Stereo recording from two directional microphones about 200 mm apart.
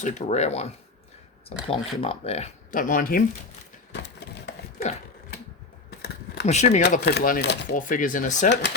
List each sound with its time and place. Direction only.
0.0 s speech: 35° left (ahead or behind)
3.9 s a sound: 60° left (ahead or behind)
6.4 s speech: 35° left (ahead or behind)
6.9 s speech: 50° left (ahead or behind)
7.8 s speech: 40° left (ahead or behind)